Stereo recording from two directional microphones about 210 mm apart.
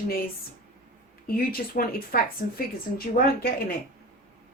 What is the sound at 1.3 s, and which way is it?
A woman's voice, 45° left (ahead or behind).